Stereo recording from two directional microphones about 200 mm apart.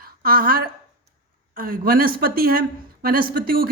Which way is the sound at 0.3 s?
45° right (ahead or behind).